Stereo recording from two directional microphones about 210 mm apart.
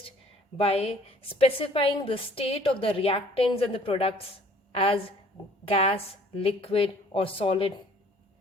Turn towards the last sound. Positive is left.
turn(degrees=25)  # may be behind; listen again after turning